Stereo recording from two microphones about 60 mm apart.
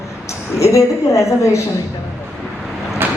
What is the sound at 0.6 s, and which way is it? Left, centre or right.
A woman's voice, left.